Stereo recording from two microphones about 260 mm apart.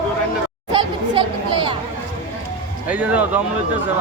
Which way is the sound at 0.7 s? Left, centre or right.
Centre.